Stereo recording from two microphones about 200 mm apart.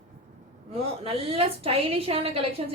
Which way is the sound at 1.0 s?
30° right (ahead or behind).